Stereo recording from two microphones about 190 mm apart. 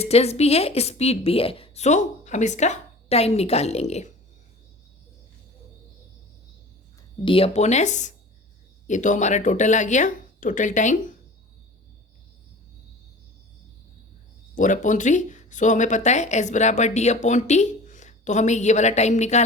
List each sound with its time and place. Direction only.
0.0 s speech: 35° left (ahead or behind)
7.3 s speech: 30° left (ahead or behind)
14.5 s speech: 40° left (ahead or behind)